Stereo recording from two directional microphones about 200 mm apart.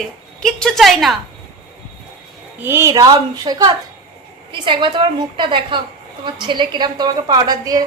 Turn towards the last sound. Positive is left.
turn(degrees=-20)  # may be behind; listen again after turning